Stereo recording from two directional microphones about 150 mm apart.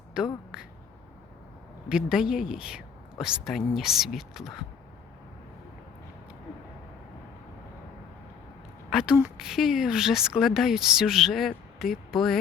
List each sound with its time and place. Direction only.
0.2 s speech: 5° right (ahead or behind)
0.5 s quack: 5° right (ahead or behind)
1.9 s speech: 5° right (ahead or behind)
8.9 s a woman's voice: 5° right (ahead or behind)